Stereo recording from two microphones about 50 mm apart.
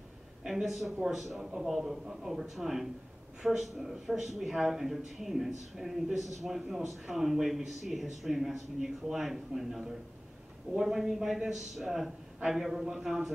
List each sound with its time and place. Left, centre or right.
0.5 s speech: centre